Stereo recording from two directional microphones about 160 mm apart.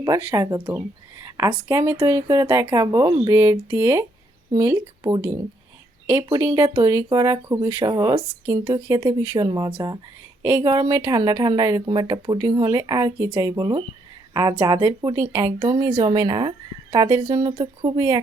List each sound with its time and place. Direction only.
0.0 s speech: 15° right (ahead or behind)
6.2 s speech: 25° right (ahead or behind)
8.5 s speech: 35° right (ahead or behind)